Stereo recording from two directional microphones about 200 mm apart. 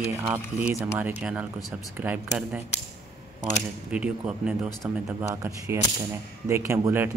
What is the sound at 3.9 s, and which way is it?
Speech, 5° right (ahead or behind).